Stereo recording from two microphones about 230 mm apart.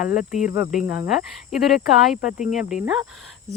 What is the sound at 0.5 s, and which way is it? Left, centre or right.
Speech, centre.